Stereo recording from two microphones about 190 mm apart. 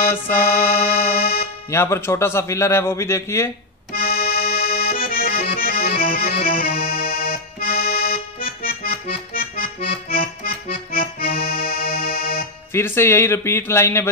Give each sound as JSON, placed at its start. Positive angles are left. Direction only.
{"t": 0.6, "sound": "music", "side_deg": 50}
{"t": 1.7, "sound": "a man's voice", "side_deg": 15}
{"t": 3.9, "sound": "accordion", "side_deg": 50}
{"t": 12.7, "sound": "a man's voice", "side_deg": 15}